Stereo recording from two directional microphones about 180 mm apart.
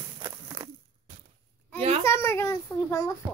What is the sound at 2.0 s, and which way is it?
A child's voice, 15° left (ahead or behind).